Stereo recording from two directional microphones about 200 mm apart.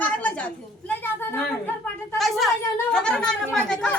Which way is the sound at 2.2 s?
Centre (ahead or behind).